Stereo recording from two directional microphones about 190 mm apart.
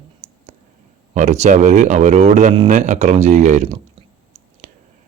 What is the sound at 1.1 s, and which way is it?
Speech, 40° right (ahead or behind).